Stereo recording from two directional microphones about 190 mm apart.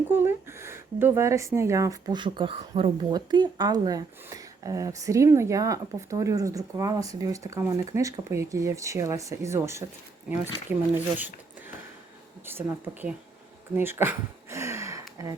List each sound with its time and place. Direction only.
0.1 s speech: 10° right (ahead or behind)
12.5 s speech: 10° right (ahead or behind)
13.7 s a sound: 10° right (ahead or behind)